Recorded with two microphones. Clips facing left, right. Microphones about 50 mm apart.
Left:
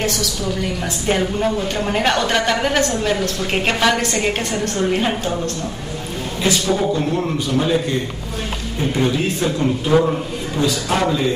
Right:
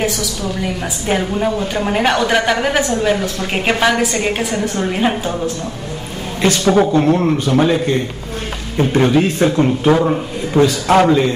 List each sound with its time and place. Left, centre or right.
1.0 s a woman's voice: centre
6.4 s a woman's voice: right
6.9 s a man's voice: right
8.9 s a man's voice: right